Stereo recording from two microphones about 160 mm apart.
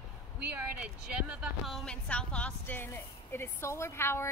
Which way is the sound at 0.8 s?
10° right (ahead or behind).